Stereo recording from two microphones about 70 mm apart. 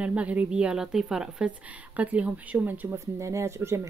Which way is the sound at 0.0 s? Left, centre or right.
Centre.